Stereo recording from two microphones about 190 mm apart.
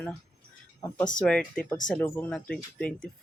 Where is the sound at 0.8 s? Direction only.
15° left (ahead or behind).